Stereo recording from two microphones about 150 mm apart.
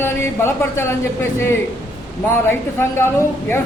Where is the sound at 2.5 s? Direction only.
15° left (ahead or behind).